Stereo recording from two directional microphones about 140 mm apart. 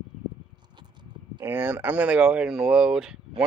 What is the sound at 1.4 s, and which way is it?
Speech, 15° right (ahead or behind).